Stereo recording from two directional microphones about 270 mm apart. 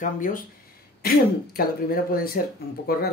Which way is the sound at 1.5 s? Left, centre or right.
Left.